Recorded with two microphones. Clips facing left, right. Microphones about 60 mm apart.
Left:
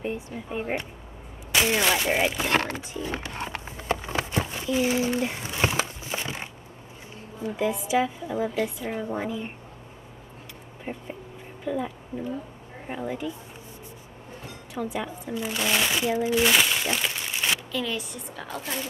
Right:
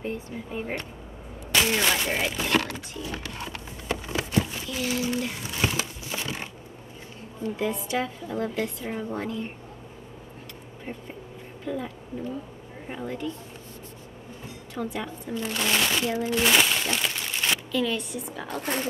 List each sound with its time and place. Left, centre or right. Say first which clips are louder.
0.1 s a woman's voice: left 1 dB; centre
2.4 s speech: left 1 dB; left
4.0 s a sound: left 1 dB; left
4.6 s speech: left 5 dB; centre
6.0 s a sound: even; left
7.5 s a woman's voice: left 4 dB; centre
10.9 s a woman's voice: left 3 dB; centre
14.7 s speech: left 1 dB; centre
18.6 s speech: right 5 dB; right